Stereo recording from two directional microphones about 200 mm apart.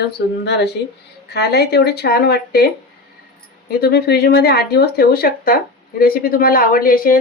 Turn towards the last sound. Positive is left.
turn(degrees=45)  # may be behind; listen again after turning